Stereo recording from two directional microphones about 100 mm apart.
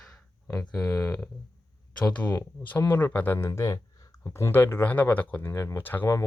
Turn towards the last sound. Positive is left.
turn(degrees=20)  # may be behind; listen again after turning